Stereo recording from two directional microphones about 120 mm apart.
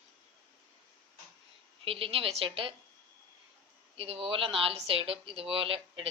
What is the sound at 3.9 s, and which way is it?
Speech, 55° right (ahead or behind).